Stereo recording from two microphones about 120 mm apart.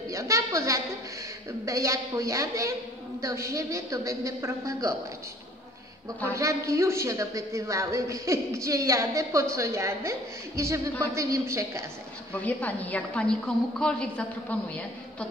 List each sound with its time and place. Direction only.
0.1 s a man's voice: 25° right (ahead or behind)
6.3 s a man's voice: 25° right (ahead or behind)
12.4 s a woman's voice: 15° left (ahead or behind)